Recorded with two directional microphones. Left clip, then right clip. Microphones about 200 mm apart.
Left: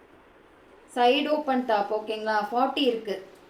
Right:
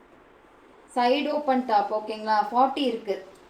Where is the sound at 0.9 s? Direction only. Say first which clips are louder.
Left 1 dB; 15° left (ahead or behind).